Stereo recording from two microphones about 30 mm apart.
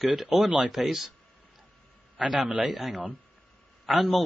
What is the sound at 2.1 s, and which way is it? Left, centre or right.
Speech, right.